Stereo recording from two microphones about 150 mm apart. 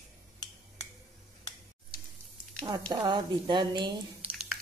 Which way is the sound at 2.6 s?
30° right (ahead or behind).